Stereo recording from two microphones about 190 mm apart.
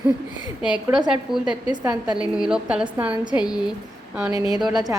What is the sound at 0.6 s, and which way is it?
A woman's voice, 5° right (ahead or behind).